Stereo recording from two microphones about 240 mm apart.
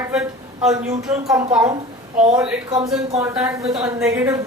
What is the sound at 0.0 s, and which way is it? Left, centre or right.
A woman's voice, centre.